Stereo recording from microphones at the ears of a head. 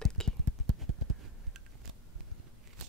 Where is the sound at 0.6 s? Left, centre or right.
Right.